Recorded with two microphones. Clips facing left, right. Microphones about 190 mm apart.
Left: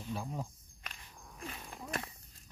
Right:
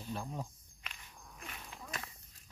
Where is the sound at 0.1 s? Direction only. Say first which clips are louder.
Left 1 dB; 5° left (ahead or behind).